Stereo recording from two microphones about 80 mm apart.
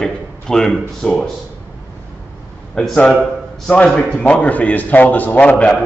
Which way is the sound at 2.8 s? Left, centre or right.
Centre.